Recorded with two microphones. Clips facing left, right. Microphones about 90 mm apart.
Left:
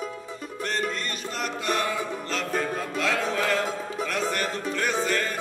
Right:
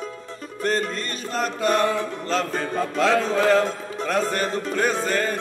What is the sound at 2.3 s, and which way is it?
Music, 45° right (ahead or behind).